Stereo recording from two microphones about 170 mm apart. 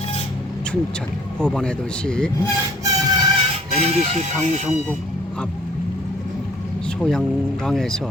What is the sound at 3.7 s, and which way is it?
Speech, 40° right (ahead or behind).